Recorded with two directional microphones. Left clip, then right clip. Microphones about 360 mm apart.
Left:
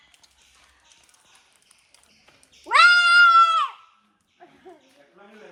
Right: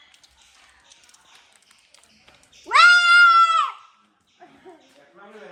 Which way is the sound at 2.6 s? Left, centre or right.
Centre.